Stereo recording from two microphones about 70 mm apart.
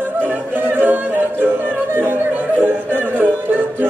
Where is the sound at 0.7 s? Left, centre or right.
Right.